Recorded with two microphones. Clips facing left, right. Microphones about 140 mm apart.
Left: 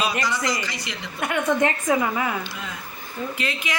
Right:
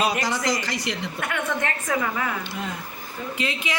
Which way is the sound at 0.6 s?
75° right (ahead or behind).